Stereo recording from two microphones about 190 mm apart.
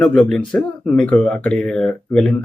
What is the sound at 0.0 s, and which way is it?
Speech, 5° left (ahead or behind).